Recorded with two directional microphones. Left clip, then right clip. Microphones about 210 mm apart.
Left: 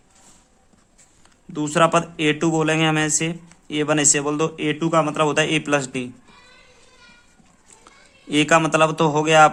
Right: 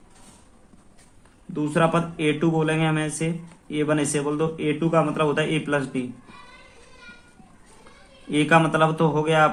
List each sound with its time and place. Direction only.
1.5 s speech: 55° left (ahead or behind)
8.3 s a man's voice: 55° left (ahead or behind)